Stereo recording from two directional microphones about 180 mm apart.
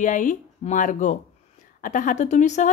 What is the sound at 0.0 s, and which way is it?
A woman's voice, 45° left (ahead or behind).